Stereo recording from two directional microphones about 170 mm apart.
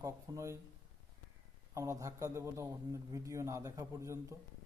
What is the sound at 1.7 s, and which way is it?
Speech, 20° right (ahead or behind).